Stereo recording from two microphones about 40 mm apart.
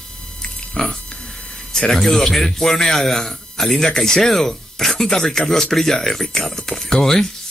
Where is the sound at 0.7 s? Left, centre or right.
Centre.